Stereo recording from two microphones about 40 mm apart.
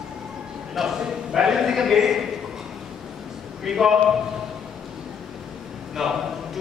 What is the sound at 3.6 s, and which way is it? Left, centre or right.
Speech, centre.